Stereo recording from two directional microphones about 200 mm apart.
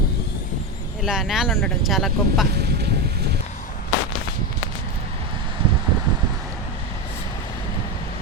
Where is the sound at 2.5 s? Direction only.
55° right (ahead or behind).